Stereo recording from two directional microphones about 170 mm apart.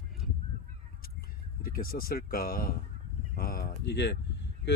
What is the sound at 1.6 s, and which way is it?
Speech, 60° left (ahead or behind).